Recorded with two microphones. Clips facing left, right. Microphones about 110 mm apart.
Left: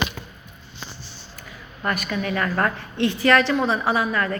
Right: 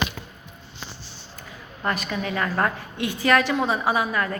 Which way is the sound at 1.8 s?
25° right (ahead or behind).